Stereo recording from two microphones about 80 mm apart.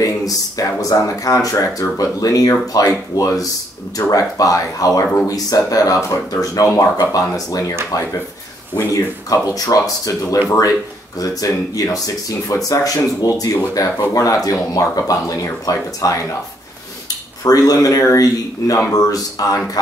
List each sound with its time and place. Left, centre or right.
0.0 s speech: left
17.4 s speech: left